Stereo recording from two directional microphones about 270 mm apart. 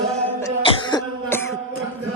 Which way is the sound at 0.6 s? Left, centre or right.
Centre.